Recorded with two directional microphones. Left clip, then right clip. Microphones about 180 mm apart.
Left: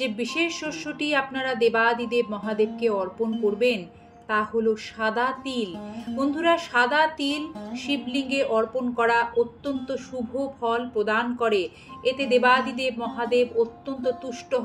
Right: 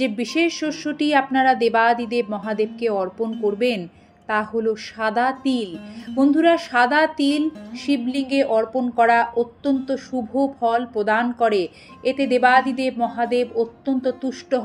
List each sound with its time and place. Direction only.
0.0 s speech: 35° right (ahead or behind)